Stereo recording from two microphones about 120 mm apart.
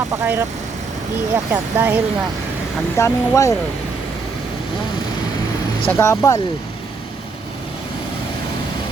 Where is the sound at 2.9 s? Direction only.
25° left (ahead or behind).